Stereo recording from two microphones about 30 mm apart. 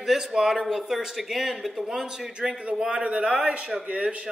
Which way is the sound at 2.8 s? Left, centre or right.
Right.